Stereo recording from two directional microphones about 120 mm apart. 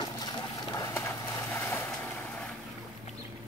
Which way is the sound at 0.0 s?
35° left (ahead or behind).